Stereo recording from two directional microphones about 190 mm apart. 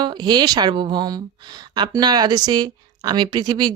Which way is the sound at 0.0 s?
25° right (ahead or behind).